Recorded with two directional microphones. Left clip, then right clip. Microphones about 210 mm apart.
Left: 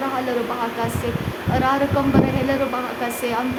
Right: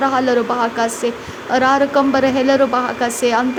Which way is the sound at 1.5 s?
30° right (ahead or behind).